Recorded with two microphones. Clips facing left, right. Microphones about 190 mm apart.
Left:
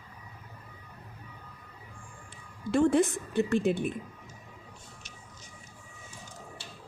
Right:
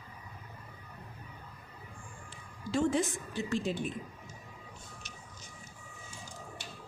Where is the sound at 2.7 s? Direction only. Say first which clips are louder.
Left 6 dB; 60° left (ahead or behind).